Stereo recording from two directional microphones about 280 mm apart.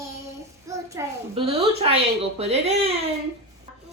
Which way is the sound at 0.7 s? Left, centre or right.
Centre.